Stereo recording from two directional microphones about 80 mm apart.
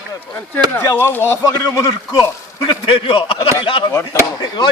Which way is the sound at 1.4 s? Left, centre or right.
Left.